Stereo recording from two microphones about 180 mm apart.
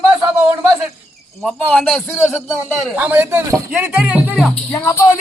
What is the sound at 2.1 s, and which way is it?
Speech, 15° left (ahead or behind).